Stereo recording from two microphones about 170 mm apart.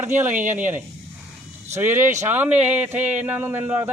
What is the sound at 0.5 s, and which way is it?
A man's voice, 10° right (ahead or behind).